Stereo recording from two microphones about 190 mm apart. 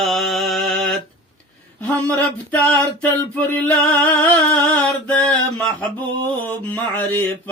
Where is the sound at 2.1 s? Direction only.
10° left (ahead or behind).